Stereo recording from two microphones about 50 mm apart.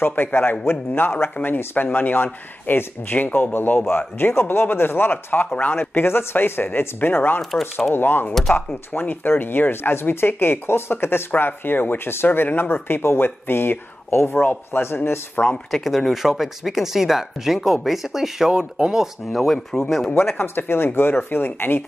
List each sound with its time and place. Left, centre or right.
0.0 s speech: left
15.7 s speech: centre
18.5 s speech: centre
19.3 s speech: centre
20.3 s speech: left